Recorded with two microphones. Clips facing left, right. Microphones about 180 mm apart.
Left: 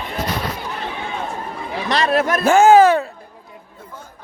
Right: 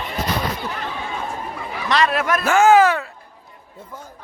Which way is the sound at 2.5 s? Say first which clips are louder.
Left 3 dB; 30° left (ahead or behind).